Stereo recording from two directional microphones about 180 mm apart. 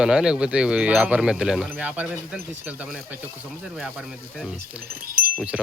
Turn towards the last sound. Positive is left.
turn(degrees=-5)  # may be behind; listen again after turning